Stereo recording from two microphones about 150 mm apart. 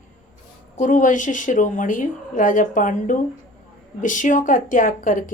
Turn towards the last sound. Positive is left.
turn(degrees=60)  # may be behind; listen again after turning